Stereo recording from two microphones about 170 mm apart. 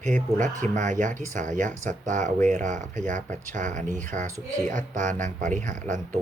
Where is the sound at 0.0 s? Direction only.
45° right (ahead or behind).